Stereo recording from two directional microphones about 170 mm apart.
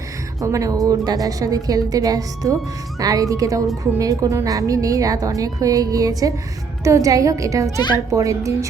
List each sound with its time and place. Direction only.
0.4 s speech: 20° right (ahead or behind)